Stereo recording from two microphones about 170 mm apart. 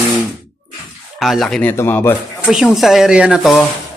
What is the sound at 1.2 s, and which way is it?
Speech, centre (ahead or behind).